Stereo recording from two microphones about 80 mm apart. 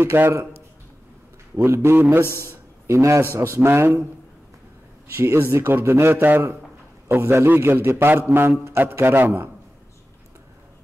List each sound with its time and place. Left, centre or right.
0.0 s a man's voice: right
1.6 s a man's voice: right
2.4 s a sound: right
3.3 s a man's voice: right
5.1 s a man's voice: right